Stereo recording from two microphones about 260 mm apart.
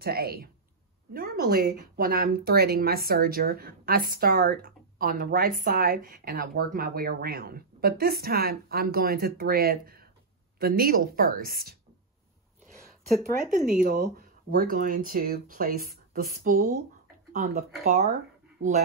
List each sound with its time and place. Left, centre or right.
0.0 s speech: right
13.4 s speech: right